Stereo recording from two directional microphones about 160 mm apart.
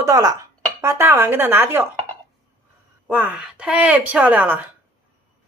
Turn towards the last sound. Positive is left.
turn(degrees=-10)  # may be behind; listen again after turning